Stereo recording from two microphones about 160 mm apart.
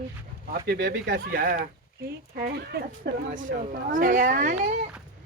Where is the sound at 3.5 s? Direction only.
75° right (ahead or behind).